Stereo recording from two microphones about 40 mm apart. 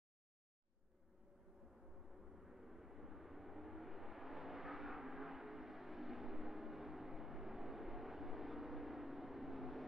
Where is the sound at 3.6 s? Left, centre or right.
Centre.